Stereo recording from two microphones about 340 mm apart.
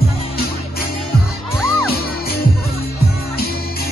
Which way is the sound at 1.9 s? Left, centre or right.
Left.